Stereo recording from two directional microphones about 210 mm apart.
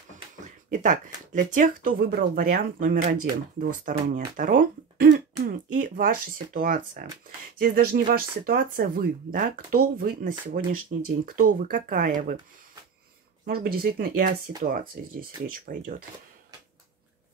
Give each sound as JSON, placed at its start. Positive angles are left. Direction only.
{"t": 0.7, "sound": "speech", "side_deg": -40}
{"t": 13.5, "sound": "speech", "side_deg": -45}